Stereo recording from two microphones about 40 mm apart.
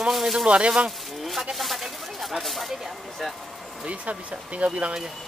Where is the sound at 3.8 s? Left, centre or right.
Right.